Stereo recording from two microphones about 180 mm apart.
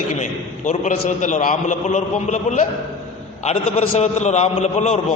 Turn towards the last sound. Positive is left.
turn(degrees=40)  # may be behind; listen again after turning